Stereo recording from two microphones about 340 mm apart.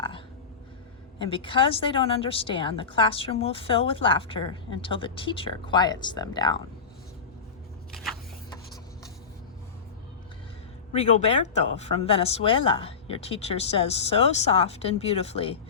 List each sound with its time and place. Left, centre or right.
1.2 s a woman's voice: centre
7.9 s a sound: centre
10.9 s a woman's voice: centre